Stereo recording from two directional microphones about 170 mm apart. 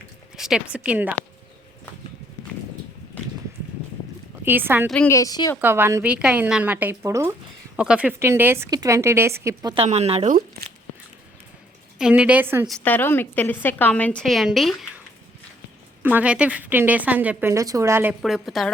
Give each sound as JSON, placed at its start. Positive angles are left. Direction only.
{"t": 0.3, "sound": "speech", "side_deg": -5}
{"t": 4.4, "sound": "a woman's voice", "side_deg": -10}
{"t": 5.0, "sound": "speech", "side_deg": 20}
{"t": 5.5, "sound": "a woman's voice", "side_deg": -10}
{"t": 7.8, "sound": "a woman's voice", "side_deg": -5}
{"t": 9.7, "sound": "speech", "side_deg": -40}
{"t": 11.9, "sound": "a woman's voice", "side_deg": -5}
{"t": 12.6, "sound": "a woman's voice", "side_deg": 5}
{"t": 16.0, "sound": "a woman's voice", "side_deg": -10}
{"t": 18.2, "sound": "a woman's voice", "side_deg": 0}